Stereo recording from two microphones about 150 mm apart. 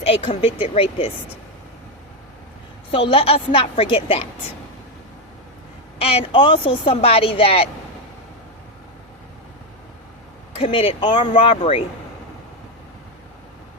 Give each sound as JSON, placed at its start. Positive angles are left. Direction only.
{"t": 0.1, "sound": "a woman's voice", "side_deg": 40}
{"t": 2.9, "sound": "a woman's voice", "side_deg": 40}
{"t": 6.0, "sound": "a woman's voice", "side_deg": 40}
{"t": 10.6, "sound": "a woman's voice", "side_deg": 40}